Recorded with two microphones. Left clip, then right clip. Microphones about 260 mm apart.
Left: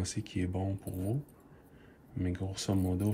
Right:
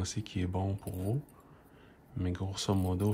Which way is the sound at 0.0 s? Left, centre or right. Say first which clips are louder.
Left 1 dB; centre.